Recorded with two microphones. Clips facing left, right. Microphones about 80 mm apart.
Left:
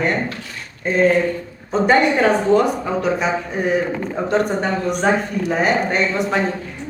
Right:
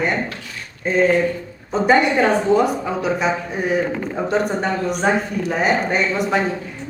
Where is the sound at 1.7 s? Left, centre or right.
Centre.